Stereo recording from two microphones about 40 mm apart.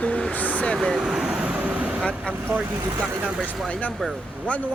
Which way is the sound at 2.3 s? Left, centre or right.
Left.